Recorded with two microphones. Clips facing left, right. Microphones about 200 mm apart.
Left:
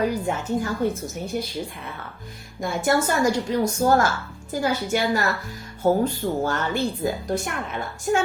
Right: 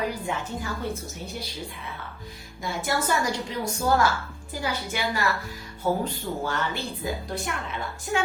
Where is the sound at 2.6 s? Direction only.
50° left (ahead or behind).